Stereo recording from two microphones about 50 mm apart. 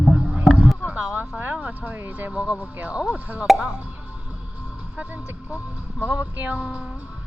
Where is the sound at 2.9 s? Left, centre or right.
Centre.